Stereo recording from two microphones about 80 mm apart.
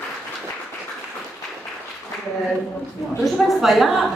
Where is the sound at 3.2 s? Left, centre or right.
Centre.